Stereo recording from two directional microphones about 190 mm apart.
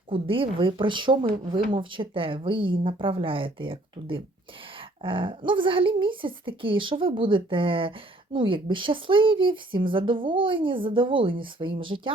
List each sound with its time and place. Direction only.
0.1 s a woman's voice: 30° right (ahead or behind)